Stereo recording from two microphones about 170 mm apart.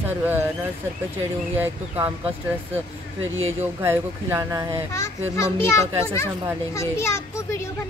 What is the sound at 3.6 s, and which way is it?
Speech, 15° right (ahead or behind).